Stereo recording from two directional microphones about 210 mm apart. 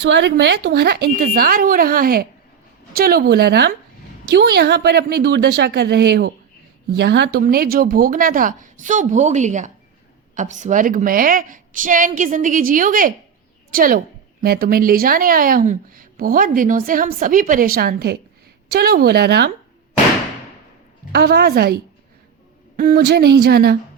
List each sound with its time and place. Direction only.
0.0 s a woman's voice: 55° right (ahead or behind)
21.1 s speech: 50° right (ahead or behind)
22.8 s speech: 50° right (ahead or behind)